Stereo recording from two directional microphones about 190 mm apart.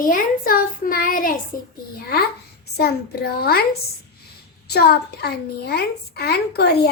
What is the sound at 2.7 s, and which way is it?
A child's voice, 55° left (ahead or behind).